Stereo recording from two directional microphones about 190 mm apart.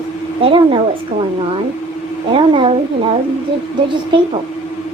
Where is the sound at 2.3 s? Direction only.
25° right (ahead or behind).